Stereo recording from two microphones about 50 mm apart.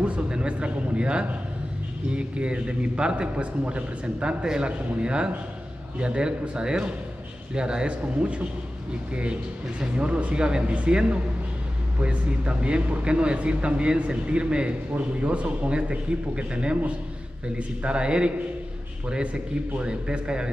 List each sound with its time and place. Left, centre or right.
0.0 s speech: right